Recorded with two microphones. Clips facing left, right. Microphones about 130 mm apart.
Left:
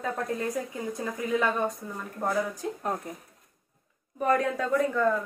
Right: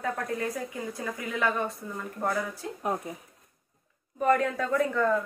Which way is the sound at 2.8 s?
10° right (ahead or behind).